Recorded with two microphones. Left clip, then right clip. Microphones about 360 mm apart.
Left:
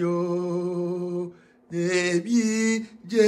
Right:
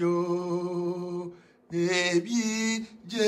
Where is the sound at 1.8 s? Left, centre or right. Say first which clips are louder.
Left 2 dB; centre.